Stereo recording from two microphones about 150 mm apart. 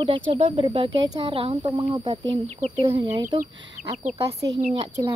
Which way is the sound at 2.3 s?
45° right (ahead or behind).